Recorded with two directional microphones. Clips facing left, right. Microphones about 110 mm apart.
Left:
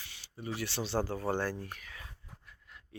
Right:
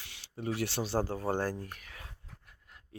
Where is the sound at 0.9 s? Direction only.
35° right (ahead or behind).